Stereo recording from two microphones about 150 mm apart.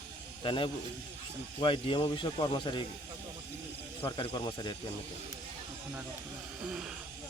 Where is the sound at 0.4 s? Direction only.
35° left (ahead or behind).